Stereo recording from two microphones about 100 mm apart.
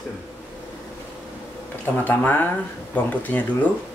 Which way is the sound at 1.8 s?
20° left (ahead or behind).